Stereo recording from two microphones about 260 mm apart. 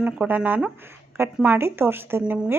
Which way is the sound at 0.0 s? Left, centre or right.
Centre.